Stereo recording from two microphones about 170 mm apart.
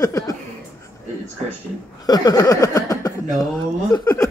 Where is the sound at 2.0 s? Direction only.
20° left (ahead or behind).